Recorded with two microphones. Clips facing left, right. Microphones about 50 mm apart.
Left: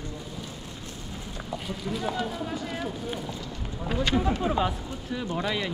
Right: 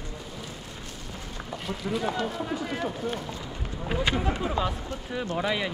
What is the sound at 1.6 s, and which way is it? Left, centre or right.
Speech, centre.